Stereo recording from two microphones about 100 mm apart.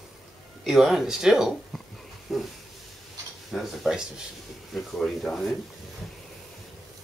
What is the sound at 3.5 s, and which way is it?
Speech, centre (ahead or behind).